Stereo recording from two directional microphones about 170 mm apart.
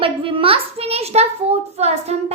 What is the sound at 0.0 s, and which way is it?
A child's voice, 30° right (ahead or behind).